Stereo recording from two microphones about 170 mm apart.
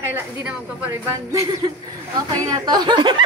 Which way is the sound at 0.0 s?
10° right (ahead or behind).